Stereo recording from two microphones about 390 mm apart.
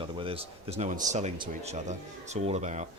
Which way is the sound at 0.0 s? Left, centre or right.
Centre.